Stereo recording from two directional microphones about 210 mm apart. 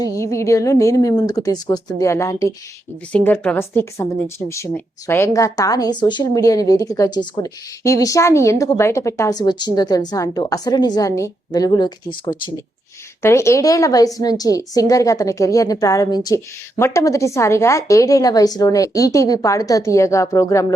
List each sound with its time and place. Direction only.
0.0 s a woman's voice: 15° left (ahead or behind)